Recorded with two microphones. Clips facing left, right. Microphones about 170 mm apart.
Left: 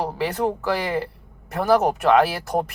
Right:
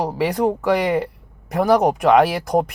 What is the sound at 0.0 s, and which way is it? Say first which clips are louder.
Speech: right 4 dB; 15° right (ahead or behind).